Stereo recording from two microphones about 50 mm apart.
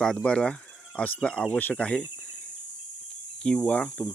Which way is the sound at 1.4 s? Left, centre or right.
Left.